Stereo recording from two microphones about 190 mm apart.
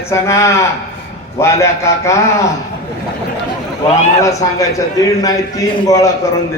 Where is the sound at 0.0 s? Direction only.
15° left (ahead or behind).